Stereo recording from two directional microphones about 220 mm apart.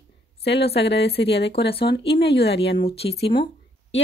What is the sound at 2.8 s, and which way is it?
Speech, 25° left (ahead or behind).